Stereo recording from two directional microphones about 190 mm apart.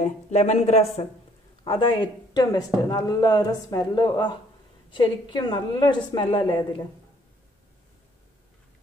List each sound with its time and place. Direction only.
0.0 s speech: 35° left (ahead or behind)